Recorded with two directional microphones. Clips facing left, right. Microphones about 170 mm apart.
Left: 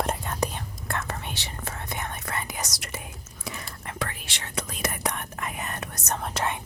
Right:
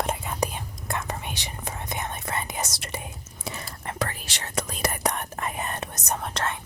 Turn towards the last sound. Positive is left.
turn(degrees=0)  # may be behind; listen again after turning